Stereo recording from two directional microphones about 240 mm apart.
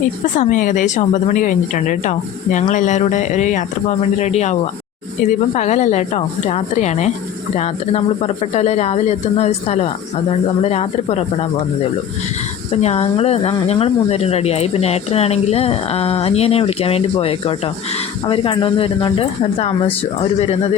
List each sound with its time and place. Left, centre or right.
0.3 s speech: left
5.5 s speech: left
12.7 s speech: left